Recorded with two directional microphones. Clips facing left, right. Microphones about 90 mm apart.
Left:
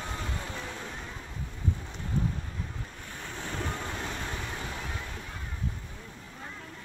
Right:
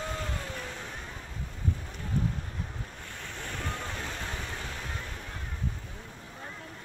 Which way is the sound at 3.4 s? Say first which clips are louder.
Left 2 dB; 15° left (ahead or behind).